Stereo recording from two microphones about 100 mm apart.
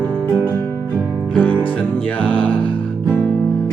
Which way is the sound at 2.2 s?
15° left (ahead or behind).